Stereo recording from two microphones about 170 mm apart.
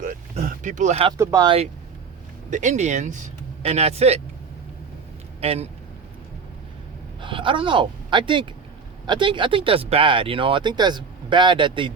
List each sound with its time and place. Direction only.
0.0 s a sound: 50° right (ahead or behind)
1.2 s speech: 15° right (ahead or behind)
2.5 s speech: 45° right (ahead or behind)
5.4 s speech: 35° right (ahead or behind)
7.2 s speech: 30° right (ahead or behind)